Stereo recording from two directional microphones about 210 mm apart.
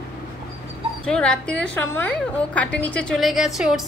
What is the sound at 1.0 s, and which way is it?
A woman's voice, 5° left (ahead or behind).